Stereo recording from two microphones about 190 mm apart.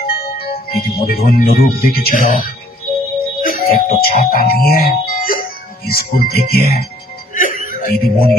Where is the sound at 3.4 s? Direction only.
45° left (ahead or behind).